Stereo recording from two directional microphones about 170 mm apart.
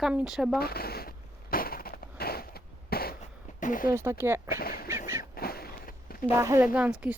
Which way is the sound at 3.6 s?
50° left (ahead or behind).